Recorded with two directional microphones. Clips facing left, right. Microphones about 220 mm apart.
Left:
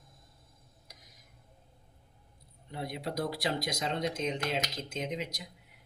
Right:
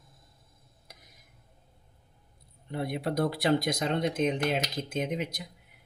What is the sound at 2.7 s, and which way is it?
Speech, 55° right (ahead or behind).